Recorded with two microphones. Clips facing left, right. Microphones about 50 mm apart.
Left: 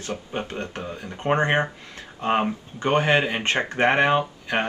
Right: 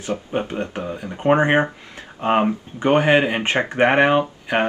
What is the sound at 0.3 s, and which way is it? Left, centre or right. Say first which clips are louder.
Speech: right 6 dB; centre.